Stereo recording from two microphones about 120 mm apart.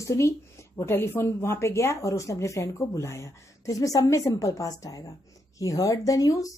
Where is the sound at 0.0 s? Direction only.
25° left (ahead or behind).